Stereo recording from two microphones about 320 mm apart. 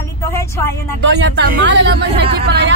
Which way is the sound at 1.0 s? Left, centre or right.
Right.